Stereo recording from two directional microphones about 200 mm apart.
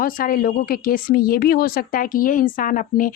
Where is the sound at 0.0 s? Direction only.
45° left (ahead or behind).